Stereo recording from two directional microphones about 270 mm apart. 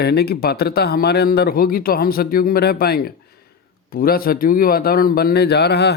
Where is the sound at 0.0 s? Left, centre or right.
Left.